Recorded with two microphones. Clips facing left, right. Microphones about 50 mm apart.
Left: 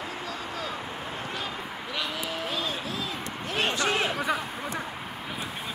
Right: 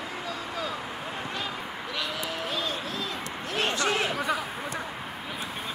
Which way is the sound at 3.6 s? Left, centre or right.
Centre.